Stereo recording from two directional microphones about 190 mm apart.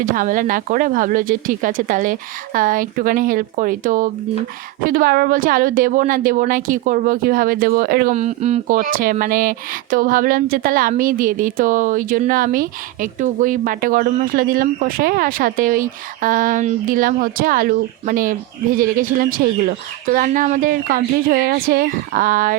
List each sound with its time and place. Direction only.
0.0 s speech: 45° right (ahead or behind)